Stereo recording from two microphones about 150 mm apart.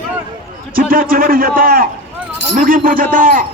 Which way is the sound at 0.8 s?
75° right (ahead or behind).